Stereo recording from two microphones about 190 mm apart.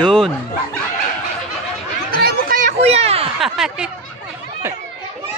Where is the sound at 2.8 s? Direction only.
35° right (ahead or behind).